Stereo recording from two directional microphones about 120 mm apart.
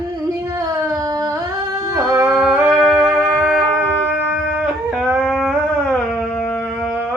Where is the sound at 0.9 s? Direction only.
30° right (ahead or behind).